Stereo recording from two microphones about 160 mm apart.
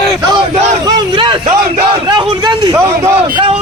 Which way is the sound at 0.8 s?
30° right (ahead or behind).